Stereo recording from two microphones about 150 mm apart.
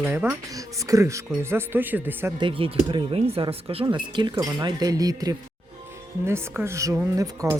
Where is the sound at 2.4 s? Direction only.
35° right (ahead or behind).